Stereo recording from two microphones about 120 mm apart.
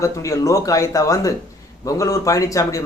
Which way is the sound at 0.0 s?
25° left (ahead or behind).